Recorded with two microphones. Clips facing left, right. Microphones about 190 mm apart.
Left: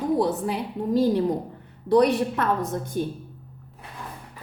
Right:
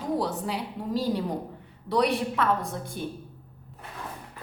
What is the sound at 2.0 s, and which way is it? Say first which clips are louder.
Speech: left 3 dB; 45° left (ahead or behind).